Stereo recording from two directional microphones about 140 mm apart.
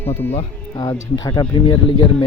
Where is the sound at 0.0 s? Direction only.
15° left (ahead or behind).